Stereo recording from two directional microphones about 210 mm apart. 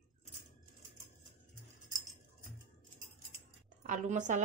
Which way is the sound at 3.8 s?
35° right (ahead or behind).